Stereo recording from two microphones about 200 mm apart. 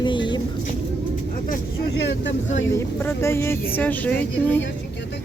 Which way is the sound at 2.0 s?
65° left (ahead or behind).